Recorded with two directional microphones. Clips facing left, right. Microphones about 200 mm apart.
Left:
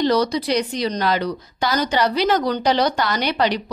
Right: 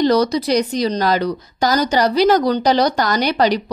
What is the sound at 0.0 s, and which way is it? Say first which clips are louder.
Speech: right 3 dB; 40° right (ahead or behind).